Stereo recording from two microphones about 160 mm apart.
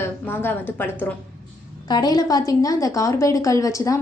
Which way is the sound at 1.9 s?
25° left (ahead or behind).